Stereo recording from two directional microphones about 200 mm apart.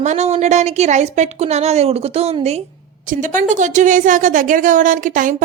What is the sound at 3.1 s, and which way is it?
A woman's voice, 40° right (ahead or behind).